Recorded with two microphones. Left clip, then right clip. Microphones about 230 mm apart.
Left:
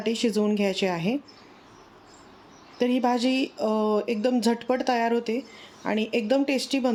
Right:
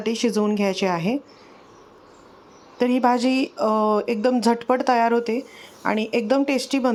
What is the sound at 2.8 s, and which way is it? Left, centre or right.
A woman's voice, centre.